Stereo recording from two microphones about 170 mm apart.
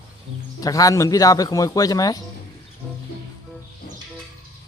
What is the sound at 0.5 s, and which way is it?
A man's voice, 20° left (ahead or behind).